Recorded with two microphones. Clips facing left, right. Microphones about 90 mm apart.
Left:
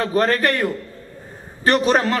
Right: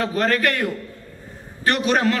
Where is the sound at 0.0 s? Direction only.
35° left (ahead or behind).